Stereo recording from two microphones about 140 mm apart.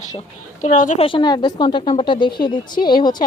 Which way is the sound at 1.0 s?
35° left (ahead or behind).